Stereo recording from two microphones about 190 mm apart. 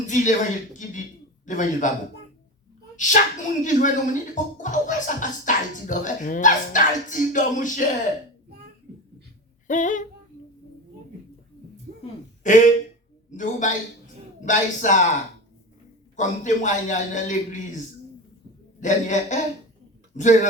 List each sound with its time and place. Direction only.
0.1 s speech: 40° left (ahead or behind)
2.9 s speech: 40° left (ahead or behind)
9.6 s speech: 40° left (ahead or behind)
12.4 s speech: 40° left (ahead or behind)
16.1 s speech: 40° left (ahead or behind)